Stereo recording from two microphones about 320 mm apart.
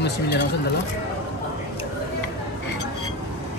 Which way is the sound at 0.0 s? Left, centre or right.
Left.